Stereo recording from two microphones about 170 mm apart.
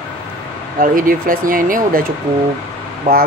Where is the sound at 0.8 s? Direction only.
55° right (ahead or behind).